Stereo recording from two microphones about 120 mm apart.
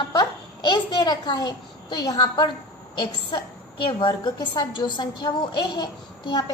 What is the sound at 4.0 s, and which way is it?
A woman's voice, 35° left (ahead or behind).